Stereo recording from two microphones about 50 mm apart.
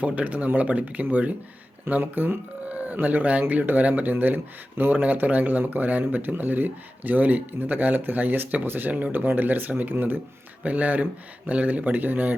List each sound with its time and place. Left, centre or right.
0.0 s speech: right
2.6 s speech: right